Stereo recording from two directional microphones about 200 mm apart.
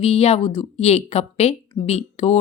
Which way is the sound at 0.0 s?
30° left (ahead or behind).